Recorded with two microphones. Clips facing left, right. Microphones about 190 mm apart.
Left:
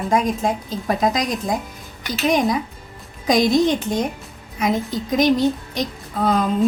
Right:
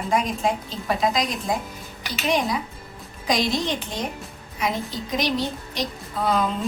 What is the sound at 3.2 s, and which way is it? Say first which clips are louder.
Speech: left 7 dB; 50° left (ahead or behind).